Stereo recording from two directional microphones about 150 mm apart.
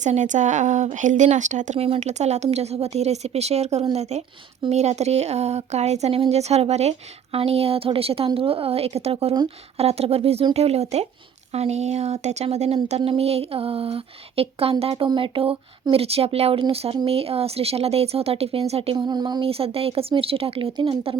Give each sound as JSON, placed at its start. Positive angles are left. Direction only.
{"t": 0.0, "sound": "a woman's voice", "side_deg": -55}